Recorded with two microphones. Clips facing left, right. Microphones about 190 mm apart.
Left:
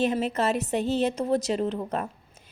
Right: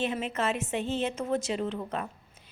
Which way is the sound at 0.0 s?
40° left (ahead or behind).